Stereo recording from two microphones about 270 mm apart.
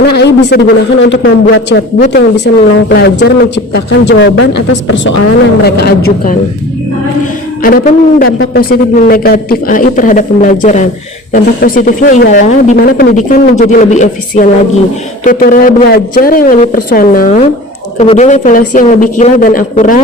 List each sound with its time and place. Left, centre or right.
0.5 s speech: left
7.6 s a man's voice: left